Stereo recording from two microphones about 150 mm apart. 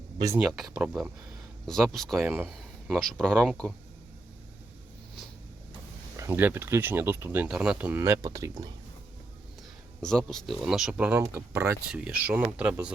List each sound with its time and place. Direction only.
0.3 s speech: centre (ahead or behind)
6.1 s speech: 15° right (ahead or behind)
10.0 s speech: 5° left (ahead or behind); by 11.8 s 15° right (ahead or behind)
11.9 s speech: 5° right (ahead or behind)